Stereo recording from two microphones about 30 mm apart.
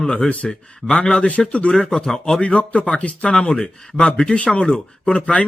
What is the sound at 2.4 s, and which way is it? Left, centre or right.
A man's voice, left.